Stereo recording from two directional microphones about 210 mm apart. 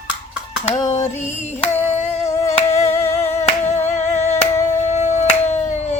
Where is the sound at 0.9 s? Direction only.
35° left (ahead or behind).